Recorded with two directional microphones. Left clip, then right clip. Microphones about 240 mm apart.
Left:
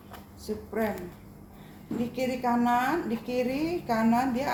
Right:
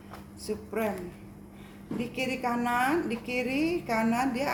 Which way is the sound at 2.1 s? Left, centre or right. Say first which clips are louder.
Left 3 dB; right.